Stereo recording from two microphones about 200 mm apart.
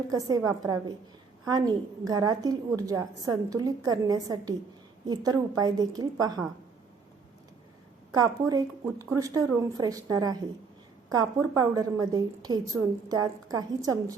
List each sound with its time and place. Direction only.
0.1 s a woman's voice: 20° right (ahead or behind)
8.1 s a woman's voice: 20° right (ahead or behind)